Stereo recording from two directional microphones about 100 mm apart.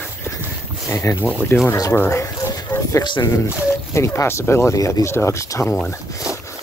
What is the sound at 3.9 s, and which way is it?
Speech, 30° left (ahead or behind).